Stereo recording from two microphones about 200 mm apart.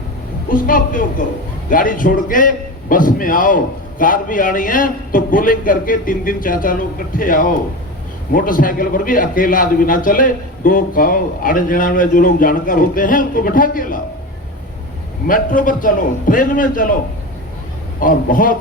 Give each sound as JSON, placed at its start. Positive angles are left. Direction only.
{"t": 0.5, "sound": "a man's voice", "side_deg": 45}
{"t": 15.3, "sound": "a man's voice", "side_deg": 40}
{"t": 18.0, "sound": "a man's voice", "side_deg": 45}